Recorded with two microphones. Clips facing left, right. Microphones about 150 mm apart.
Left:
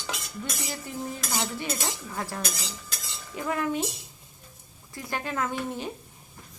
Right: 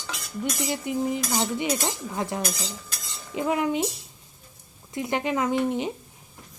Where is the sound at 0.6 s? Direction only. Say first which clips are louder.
Right 10 dB; 20° right (ahead or behind).